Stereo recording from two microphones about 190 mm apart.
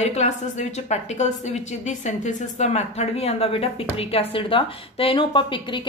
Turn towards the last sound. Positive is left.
turn(degrees=25)  # may be behind; listen again after turning